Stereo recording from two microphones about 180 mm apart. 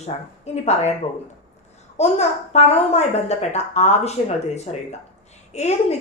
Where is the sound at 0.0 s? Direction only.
35° left (ahead or behind).